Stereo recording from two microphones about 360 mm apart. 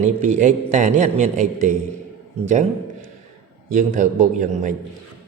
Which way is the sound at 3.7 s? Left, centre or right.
Right.